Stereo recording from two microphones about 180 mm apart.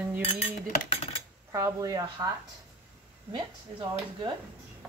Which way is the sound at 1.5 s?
15° right (ahead or behind).